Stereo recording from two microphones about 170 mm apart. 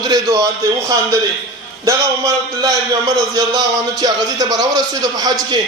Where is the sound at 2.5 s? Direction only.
20° right (ahead or behind).